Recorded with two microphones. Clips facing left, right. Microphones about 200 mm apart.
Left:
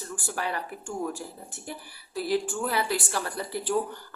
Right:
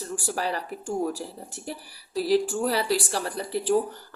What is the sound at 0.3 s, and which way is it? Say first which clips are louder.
Speech: right 2 dB; 35° right (ahead or behind).